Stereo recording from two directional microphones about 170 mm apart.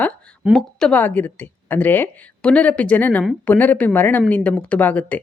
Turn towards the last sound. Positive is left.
turn(degrees=10)  # may be behind; listen again after turning